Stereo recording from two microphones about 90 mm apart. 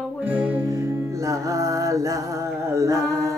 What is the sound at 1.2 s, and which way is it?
Music, 40° right (ahead or behind).